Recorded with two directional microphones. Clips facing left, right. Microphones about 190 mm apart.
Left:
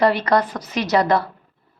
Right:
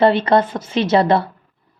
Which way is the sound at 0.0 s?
25° right (ahead or behind).